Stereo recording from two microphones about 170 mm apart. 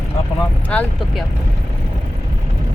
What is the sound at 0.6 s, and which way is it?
Speech, 10° left (ahead or behind).